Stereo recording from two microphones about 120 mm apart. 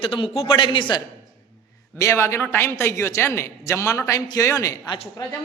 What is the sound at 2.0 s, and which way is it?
A man's voice, 25° left (ahead or behind).